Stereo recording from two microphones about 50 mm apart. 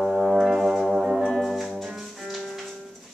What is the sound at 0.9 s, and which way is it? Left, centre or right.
Music, centre.